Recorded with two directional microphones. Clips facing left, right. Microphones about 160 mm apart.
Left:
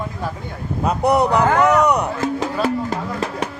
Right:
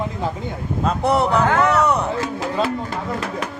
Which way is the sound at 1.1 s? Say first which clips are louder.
Left 2 dB; 15° left (ahead or behind).